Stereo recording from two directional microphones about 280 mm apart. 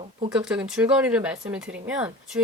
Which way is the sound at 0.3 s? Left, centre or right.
Centre.